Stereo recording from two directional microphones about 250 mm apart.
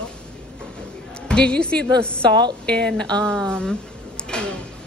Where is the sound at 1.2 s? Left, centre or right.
Centre.